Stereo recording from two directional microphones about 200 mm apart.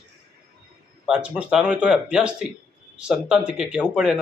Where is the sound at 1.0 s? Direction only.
5° right (ahead or behind).